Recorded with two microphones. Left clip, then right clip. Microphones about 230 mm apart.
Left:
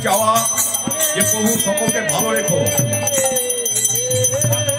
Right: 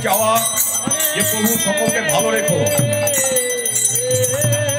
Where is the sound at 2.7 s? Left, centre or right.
Right.